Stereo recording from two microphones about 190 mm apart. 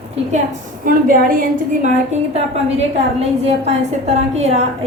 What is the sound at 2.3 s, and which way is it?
A woman's voice, 35° right (ahead or behind).